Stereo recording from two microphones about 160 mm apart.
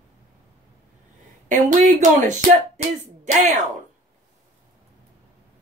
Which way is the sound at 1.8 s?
50° right (ahead or behind).